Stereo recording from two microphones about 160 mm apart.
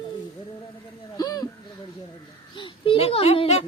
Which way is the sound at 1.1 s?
25° left (ahead or behind).